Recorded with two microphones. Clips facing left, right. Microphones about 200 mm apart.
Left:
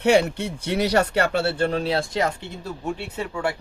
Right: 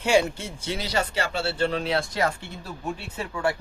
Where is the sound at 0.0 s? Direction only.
65° left (ahead or behind); by 2.0 s 40° left (ahead or behind).